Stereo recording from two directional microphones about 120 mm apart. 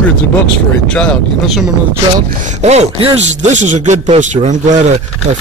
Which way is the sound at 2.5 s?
65° right (ahead or behind).